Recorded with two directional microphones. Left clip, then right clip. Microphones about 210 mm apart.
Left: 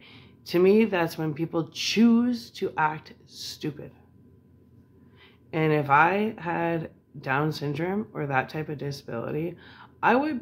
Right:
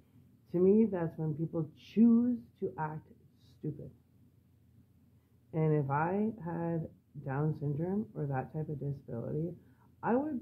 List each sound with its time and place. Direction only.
0.5 s speech: 15° left (ahead or behind)
5.5 s speech: 15° left (ahead or behind)